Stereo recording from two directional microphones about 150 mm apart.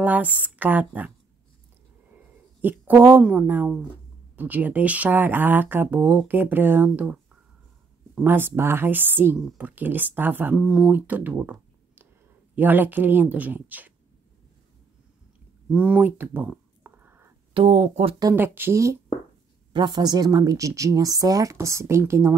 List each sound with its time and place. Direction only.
0.0 s speech: 10° right (ahead or behind)
2.6 s speech: 15° right (ahead or behind)
15.7 s a sound: 5° right (ahead or behind)
17.6 s speech: 50° right (ahead or behind)
18.3 s speech: 15° right (ahead or behind)
19.7 s speech: 30° right (ahead or behind)